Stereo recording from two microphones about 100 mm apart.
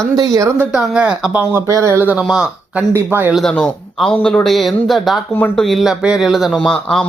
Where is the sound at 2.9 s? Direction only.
20° right (ahead or behind).